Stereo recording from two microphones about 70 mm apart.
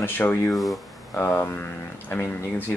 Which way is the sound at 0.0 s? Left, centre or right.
Left.